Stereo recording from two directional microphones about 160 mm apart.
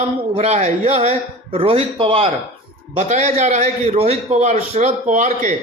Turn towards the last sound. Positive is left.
turn(degrees=-50)  # may be behind; listen again after turning